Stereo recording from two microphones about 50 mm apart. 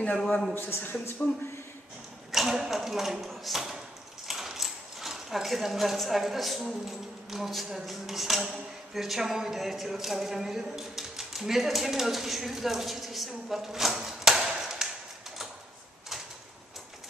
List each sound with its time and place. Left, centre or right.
0.2 s speech: centre
0.6 s a man's voice: left
2.3 s speech: centre